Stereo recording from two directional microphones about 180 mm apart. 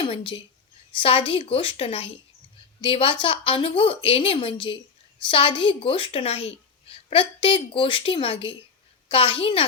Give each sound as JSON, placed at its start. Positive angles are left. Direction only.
{"t": 0.0, "sound": "a woman's voice", "side_deg": 30}